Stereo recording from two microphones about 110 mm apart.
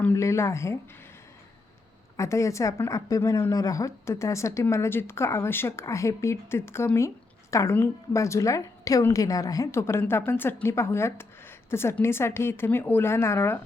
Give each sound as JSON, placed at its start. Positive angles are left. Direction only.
{"t": 0.1, "sound": "a woman's voice", "side_deg": 25}
{"t": 2.1, "sound": "a woman's voice", "side_deg": 25}